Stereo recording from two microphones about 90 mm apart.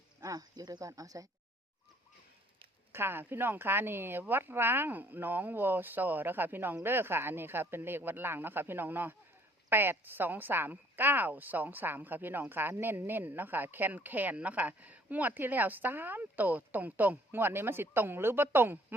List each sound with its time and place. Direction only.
0.2 s speech: 45° right (ahead or behind)
2.9 s a woman's voice: 25° right (ahead or behind)